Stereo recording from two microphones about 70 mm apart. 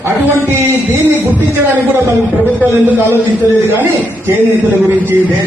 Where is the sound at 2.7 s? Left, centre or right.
Right.